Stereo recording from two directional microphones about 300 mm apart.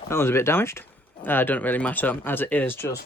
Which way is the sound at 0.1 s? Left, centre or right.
Centre.